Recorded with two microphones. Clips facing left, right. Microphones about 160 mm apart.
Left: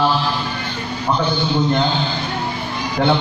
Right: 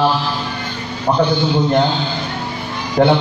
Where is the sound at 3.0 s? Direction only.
45° right (ahead or behind).